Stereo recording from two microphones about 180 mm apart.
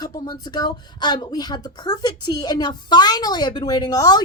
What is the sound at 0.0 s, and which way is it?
Speech, 25° left (ahead or behind).